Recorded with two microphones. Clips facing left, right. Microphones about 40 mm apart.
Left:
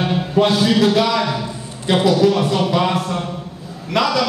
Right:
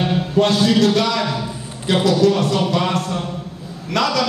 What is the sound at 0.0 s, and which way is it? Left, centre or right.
A man's voice, centre.